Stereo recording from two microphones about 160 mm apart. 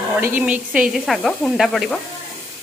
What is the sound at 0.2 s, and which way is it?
Speech, 10° right (ahead or behind).